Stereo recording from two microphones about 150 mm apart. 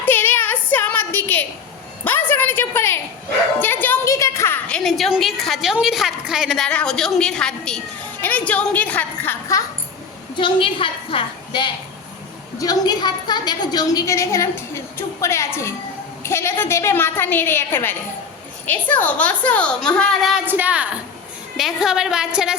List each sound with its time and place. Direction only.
0.0 s a sound: 15° left (ahead or behind)
3.6 s a woman's voice: 15° left (ahead or behind)
10.3 s a woman's voice: 35° left (ahead or behind); by 20.4 s centre (ahead or behind)
20.4 s a woman's voice: 10° right (ahead or behind)